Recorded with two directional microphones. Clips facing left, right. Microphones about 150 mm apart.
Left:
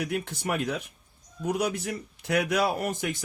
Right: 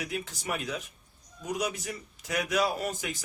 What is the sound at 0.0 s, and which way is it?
Speech, 60° left (ahead or behind).